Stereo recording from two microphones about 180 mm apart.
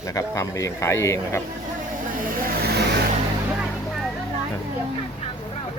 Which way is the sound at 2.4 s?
55° right (ahead or behind).